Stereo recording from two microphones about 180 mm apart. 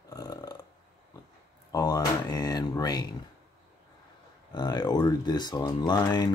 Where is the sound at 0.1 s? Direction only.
20° left (ahead or behind).